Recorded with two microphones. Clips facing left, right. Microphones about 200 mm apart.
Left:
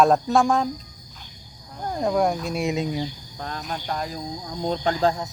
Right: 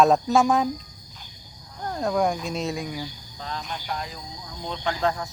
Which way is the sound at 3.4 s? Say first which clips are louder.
Left 1 dB; 50° left (ahead or behind).